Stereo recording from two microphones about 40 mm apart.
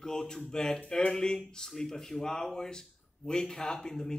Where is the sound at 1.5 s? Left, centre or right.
Centre.